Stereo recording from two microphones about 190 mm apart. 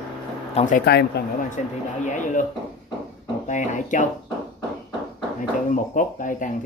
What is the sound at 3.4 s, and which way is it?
Speech, 40° left (ahead or behind).